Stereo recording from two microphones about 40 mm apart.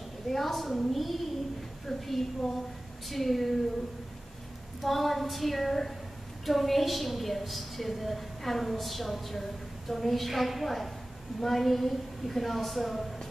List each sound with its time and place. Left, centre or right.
0.3 s a woman's voice: centre
4.8 s a woman's voice: centre